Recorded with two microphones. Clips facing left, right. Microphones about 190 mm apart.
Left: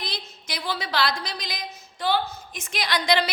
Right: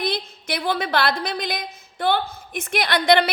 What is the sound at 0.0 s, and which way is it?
A woman's voice, 55° right (ahead or behind).